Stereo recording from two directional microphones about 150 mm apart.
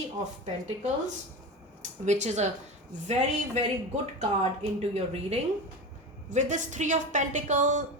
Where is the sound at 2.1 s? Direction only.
50° right (ahead or behind).